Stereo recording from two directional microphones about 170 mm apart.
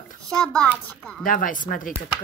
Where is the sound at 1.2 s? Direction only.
55° left (ahead or behind).